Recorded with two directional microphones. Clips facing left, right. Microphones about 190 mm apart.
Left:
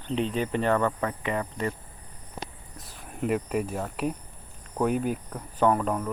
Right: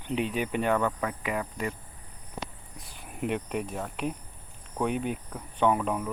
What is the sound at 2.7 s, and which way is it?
Speech, centre (ahead or behind).